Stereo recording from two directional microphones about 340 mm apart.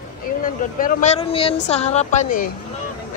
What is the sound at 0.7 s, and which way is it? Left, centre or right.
Speech, left.